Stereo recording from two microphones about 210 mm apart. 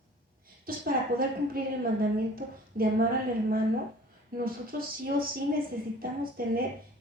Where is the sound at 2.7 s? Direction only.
40° right (ahead or behind).